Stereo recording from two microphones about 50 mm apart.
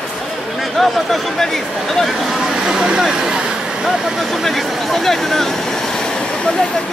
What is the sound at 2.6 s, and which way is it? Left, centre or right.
Vehicle, centre.